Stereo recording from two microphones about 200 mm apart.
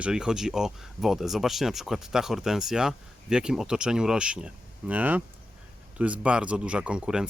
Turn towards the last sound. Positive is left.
turn(degrees=-5)  # may be behind; listen again after turning